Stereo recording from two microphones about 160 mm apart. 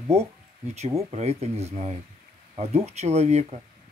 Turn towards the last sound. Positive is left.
turn(degrees=-45)  # may be behind; listen again after turning